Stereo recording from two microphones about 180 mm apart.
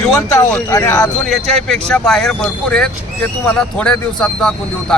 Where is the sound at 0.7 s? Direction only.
20° left (ahead or behind).